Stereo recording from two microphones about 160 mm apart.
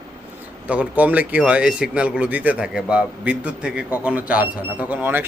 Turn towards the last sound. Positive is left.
turn(degrees=-10)  # may be behind; listen again after turning